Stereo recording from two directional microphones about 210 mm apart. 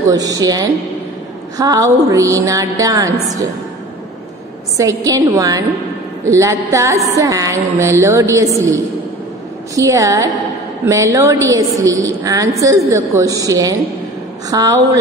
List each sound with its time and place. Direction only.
0.1 s a woman's voice: 15° right (ahead or behind)
4.7 s a woman's voice: 15° right (ahead or behind)